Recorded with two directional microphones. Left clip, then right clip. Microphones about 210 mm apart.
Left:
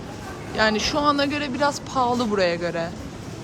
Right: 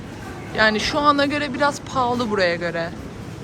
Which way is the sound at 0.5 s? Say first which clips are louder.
Right 3 dB; 15° left (ahead or behind).